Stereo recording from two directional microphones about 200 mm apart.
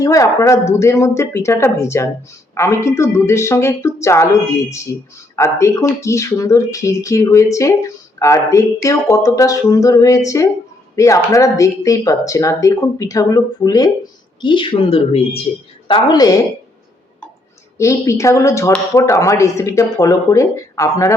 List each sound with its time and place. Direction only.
0.0 s speech: 15° left (ahead or behind)
17.7 s speech: 15° left (ahead or behind)